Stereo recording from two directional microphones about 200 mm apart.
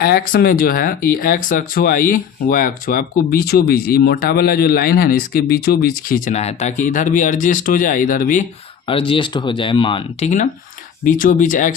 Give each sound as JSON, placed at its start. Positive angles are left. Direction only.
{"t": 0.0, "sound": "speech", "side_deg": 50}
{"t": 8.9, "sound": "speech", "side_deg": 25}